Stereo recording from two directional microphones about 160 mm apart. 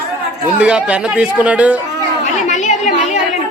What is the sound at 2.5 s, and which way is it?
Chatter, 50° left (ahead or behind).